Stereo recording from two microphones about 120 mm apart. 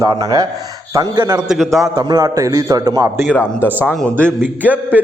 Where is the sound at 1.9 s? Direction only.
30° right (ahead or behind).